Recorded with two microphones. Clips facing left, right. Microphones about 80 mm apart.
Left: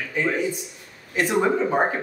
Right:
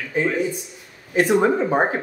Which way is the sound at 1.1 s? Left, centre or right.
Right.